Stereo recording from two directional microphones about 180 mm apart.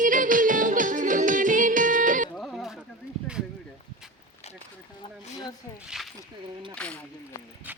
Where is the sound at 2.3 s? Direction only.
Centre (ahead or behind).